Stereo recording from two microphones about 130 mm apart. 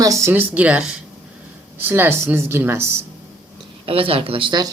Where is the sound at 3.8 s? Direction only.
45° right (ahead or behind).